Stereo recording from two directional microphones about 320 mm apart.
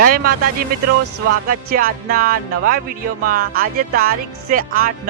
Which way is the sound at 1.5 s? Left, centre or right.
Right.